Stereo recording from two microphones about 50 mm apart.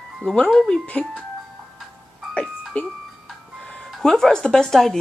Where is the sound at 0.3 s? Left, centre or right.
Centre.